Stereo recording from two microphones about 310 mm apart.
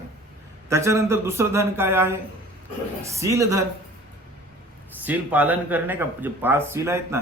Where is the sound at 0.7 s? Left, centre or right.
Centre.